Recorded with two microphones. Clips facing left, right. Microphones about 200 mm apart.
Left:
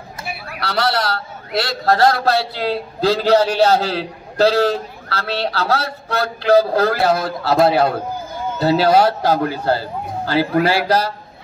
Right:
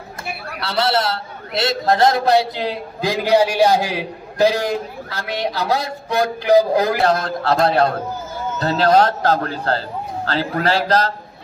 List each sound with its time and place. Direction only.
0.6 s a man's voice: 25° right (ahead or behind)
7.1 s a man's voice: 5° left (ahead or behind)